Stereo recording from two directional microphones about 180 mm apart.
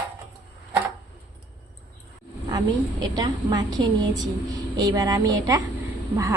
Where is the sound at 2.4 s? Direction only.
20° right (ahead or behind).